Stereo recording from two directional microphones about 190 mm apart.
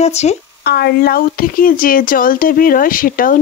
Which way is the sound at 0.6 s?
55° left (ahead or behind).